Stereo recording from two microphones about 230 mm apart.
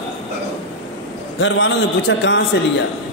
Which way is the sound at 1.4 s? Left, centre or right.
Left.